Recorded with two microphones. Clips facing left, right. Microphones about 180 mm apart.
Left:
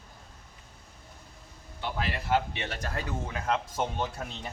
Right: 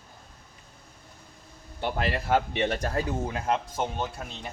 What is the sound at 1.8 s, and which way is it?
A man's voice, 55° right (ahead or behind).